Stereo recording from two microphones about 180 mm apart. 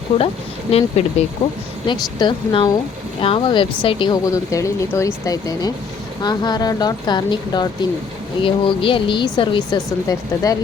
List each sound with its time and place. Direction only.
0.7 s speech: 35° left (ahead or behind)